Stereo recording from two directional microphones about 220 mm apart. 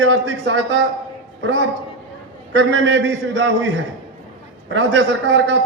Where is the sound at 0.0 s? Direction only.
60° right (ahead or behind).